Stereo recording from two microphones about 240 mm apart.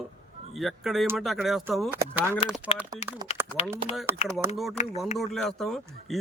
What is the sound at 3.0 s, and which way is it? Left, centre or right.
Speech, centre.